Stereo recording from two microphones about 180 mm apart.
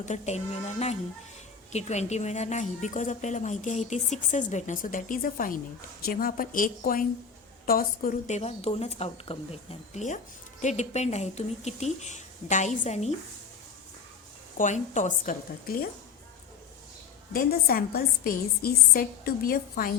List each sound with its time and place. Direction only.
0.0 s a woman's voice: 40° left (ahead or behind)
14.6 s speech: 45° left (ahead or behind)
17.3 s a woman's voice: 55° left (ahead or behind)